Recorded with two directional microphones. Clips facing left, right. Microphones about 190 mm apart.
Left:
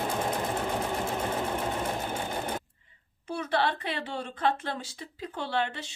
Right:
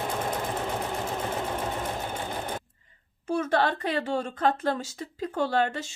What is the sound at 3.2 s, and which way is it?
Speech, 45° right (ahead or behind).